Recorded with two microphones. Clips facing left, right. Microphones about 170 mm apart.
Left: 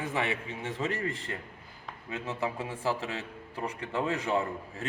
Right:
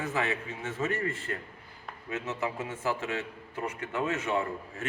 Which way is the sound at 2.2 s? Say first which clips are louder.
Left 1 dB; 30° left (ahead or behind).